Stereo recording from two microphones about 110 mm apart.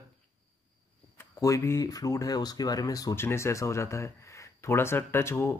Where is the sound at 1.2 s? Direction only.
30° left (ahead or behind).